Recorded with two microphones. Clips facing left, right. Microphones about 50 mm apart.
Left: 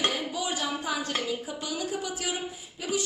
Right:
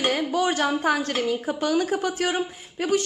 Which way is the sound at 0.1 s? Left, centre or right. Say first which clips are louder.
Right 8 dB; right.